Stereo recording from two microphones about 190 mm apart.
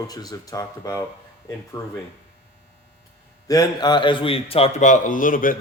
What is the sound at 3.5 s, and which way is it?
Speech, 20° left (ahead or behind).